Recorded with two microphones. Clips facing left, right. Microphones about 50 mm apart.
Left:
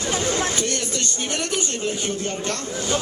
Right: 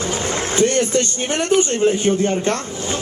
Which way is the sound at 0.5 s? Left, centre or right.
Right.